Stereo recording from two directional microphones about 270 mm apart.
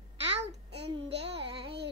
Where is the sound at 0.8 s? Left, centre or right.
Right.